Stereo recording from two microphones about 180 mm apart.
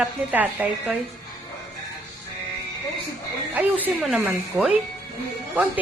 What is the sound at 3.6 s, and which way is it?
A woman's voice, 10° right (ahead or behind).